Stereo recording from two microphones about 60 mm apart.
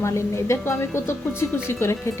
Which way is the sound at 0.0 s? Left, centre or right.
Left.